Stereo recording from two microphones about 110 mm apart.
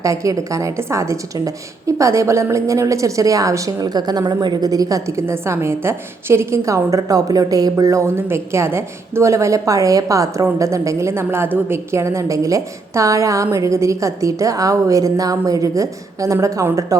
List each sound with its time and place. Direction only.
0.0 s a woman's voice: 30° right (ahead or behind)